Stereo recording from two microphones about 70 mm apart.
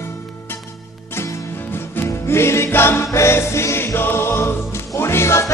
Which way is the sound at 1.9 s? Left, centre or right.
Left.